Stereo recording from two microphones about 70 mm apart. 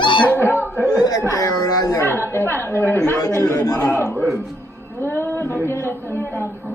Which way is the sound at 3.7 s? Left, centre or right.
Left.